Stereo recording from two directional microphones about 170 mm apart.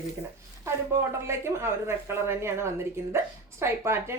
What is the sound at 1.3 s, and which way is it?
A woman's voice, 15° right (ahead or behind).